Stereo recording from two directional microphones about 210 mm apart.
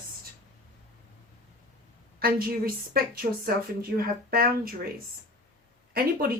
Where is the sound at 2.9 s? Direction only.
45° right (ahead or behind).